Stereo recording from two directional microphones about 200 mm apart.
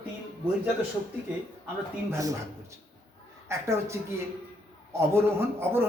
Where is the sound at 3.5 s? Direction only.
15° right (ahead or behind).